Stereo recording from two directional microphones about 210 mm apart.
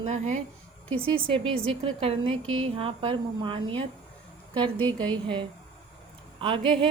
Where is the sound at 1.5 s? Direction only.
70° right (ahead or behind).